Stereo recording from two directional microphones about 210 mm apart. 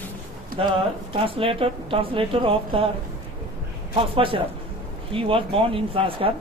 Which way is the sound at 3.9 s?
25° right (ahead or behind).